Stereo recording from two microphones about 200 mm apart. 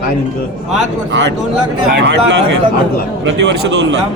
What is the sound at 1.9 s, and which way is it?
A man's voice, 60° right (ahead or behind).